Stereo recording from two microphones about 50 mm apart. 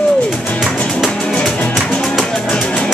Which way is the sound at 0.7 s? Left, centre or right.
Centre.